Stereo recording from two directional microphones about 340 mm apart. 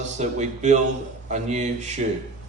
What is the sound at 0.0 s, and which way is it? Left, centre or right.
Speech, right.